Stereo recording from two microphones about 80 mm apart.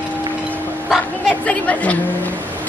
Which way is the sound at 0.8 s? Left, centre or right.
Centre.